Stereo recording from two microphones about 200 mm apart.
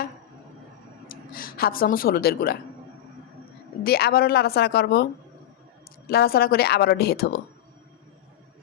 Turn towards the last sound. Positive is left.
turn(degrees=50)  # may be behind; listen again after turning